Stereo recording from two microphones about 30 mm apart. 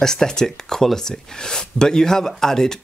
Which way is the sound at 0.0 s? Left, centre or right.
Centre.